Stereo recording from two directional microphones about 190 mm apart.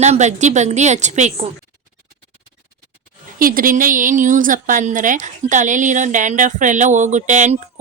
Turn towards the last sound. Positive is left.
turn(degrees=-40)  # may be behind; listen again after turning